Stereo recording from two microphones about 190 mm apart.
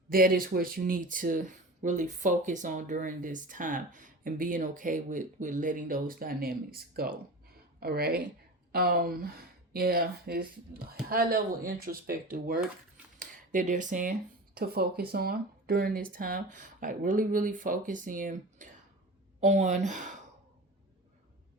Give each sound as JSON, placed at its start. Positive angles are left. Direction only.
{"t": 0.1, "sound": "speech", "side_deg": -50}